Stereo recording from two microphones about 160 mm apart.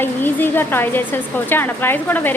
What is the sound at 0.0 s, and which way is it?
A woman's voice, 10° left (ahead or behind).